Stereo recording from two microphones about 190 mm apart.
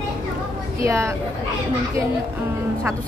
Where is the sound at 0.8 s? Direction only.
15° right (ahead or behind).